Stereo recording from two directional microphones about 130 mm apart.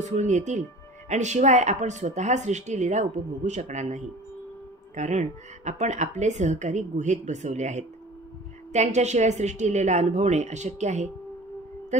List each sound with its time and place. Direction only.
0.0 s speech: 65° right (ahead or behind)